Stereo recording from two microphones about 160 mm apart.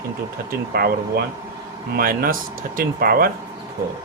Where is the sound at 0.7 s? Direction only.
75° right (ahead or behind).